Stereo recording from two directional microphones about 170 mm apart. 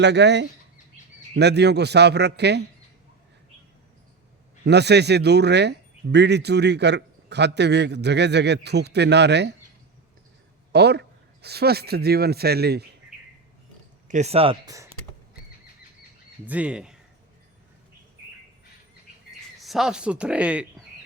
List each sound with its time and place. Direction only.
0.0 s speech: 90° right
4.6 s speech: 80° right
10.7 s a man's voice: 75° right (ahead or behind)
14.1 s speech: 40° right (ahead or behind)
14.7 s speech: 20° right (ahead or behind)
16.5 s speech: 5° right (ahead or behind)
19.5 s speech: centre (ahead or behind)